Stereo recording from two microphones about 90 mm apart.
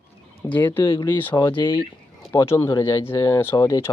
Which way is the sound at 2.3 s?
30° left (ahead or behind).